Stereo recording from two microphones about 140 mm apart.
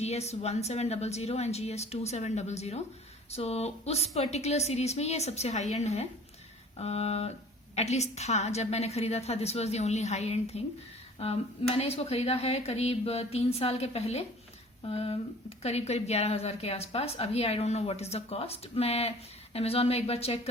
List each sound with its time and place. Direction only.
0.0 s speech: 50° left (ahead or behind)